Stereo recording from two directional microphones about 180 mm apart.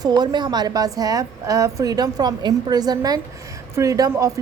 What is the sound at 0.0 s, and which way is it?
A woman's voice, 20° right (ahead or behind).